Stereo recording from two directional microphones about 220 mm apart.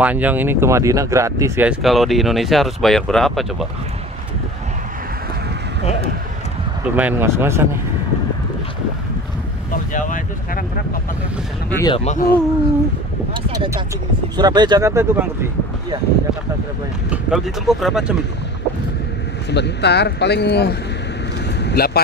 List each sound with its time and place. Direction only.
0.0 s speech: 5° right (ahead or behind)
7.0 s speech: 10° right (ahead or behind)
9.9 s speech: 35° left (ahead or behind)
11.7 s speech: 15° left (ahead or behind)
12.0 s speech: 30° left (ahead or behind)
14.3 s speech: 20° right (ahead or behind)
17.1 s speech: centre (ahead or behind)
19.5 s speech: 50° left (ahead or behind)